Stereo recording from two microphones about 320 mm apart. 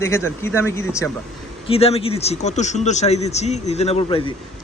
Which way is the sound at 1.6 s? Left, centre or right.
Centre.